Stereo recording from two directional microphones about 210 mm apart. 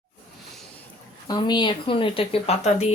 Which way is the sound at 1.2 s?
20° left (ahead or behind).